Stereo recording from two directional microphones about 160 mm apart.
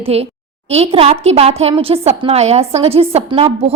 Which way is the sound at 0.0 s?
40° right (ahead or behind).